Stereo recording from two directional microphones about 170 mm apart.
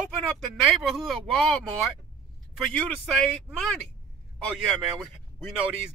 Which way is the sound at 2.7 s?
5° left (ahead or behind).